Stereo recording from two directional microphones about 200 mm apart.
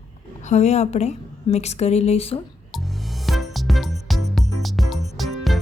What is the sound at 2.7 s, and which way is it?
Music, centre (ahead or behind).